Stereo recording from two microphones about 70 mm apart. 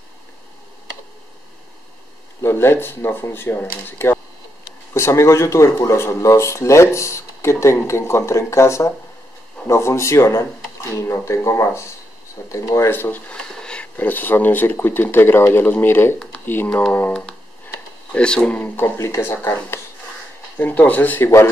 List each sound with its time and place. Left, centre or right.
2.4 s speech: left
4.9 s speech: left
13.3 s a sound: centre
13.9 s speech: left
18.1 s speech: centre
18.9 s speech: left